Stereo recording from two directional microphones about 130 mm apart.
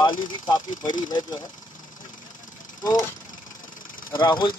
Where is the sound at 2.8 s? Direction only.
25° left (ahead or behind).